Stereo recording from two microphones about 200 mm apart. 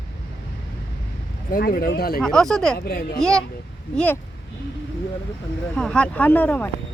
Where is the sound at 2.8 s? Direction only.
50° left (ahead or behind).